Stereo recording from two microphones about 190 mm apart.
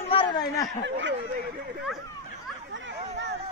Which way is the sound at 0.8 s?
70° right (ahead or behind).